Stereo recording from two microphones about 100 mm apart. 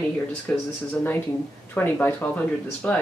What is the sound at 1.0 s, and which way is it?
Speech, 25° left (ahead or behind).